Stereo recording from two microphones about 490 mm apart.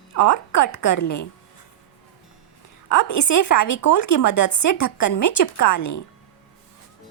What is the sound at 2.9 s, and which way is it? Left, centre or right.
A woman's voice, left.